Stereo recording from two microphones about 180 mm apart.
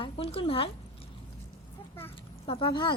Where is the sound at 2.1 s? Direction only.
30° left (ahead or behind).